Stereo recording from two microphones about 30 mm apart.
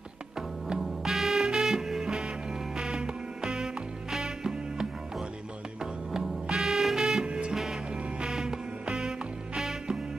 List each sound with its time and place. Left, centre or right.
0.7 s music: centre
6.1 s music: centre
7.2 s music: right
8.2 s music: right